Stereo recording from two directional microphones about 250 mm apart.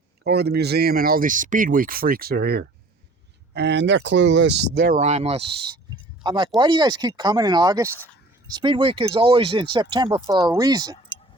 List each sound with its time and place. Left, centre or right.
0.3 s speech: right; by 11.2 s centre